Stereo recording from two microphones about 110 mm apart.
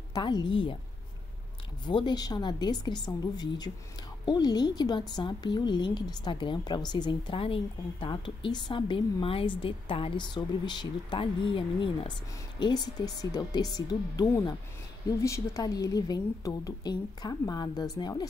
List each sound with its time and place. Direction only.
0.1 s speech: 40° left (ahead or behind)
1.9 s a woman's voice: 45° left (ahead or behind)
12.5 s a woman's voice: 40° left (ahead or behind)